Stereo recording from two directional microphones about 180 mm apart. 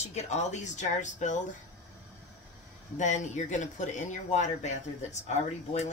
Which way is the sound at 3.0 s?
40° left (ahead or behind).